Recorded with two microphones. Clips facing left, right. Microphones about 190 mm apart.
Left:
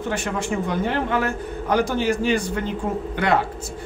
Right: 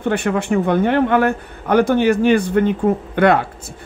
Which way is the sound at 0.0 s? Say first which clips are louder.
Right 7 dB; 60° right (ahead or behind).